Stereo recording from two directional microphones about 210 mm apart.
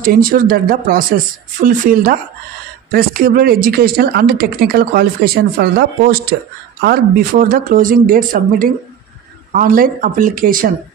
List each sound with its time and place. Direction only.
0.0 s speech: 40° right (ahead or behind)